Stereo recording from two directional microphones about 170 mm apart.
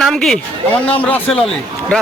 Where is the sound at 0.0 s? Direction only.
Centre (ahead or behind).